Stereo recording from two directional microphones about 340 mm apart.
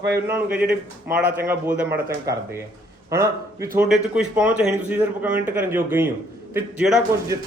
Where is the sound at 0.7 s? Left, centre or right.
Centre.